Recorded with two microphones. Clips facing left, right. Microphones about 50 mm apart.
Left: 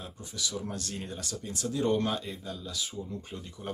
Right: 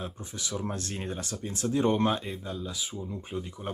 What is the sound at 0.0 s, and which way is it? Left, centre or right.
Speech, right.